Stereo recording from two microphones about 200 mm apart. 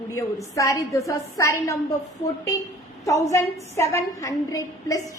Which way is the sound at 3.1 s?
15° left (ahead or behind).